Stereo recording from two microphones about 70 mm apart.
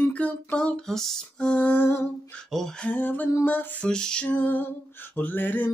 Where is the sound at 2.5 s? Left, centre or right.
Centre.